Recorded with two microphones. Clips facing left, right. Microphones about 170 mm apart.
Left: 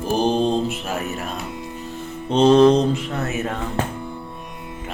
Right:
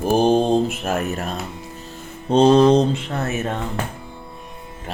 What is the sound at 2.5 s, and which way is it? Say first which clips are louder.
Mantra: left 2 dB; 5° right (ahead or behind).